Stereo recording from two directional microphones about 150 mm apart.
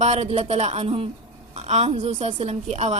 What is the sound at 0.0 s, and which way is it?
A woman's voice, 45° right (ahead or behind).